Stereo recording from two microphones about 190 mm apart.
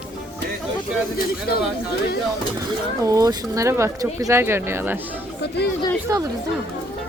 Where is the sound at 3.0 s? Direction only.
20° right (ahead or behind).